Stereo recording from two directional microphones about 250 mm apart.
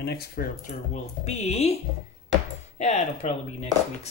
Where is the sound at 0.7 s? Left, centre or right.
Left.